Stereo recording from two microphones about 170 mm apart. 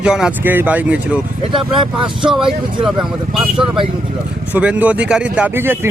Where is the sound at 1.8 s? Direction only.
30° right (ahead or behind).